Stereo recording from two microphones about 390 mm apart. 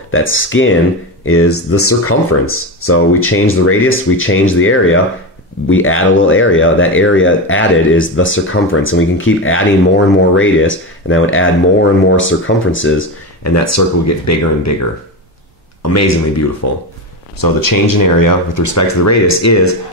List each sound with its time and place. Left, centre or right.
0.1 s speech: left
15.9 s speech: left
17.4 s speech: left